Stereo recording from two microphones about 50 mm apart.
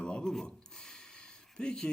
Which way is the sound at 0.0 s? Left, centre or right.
Centre.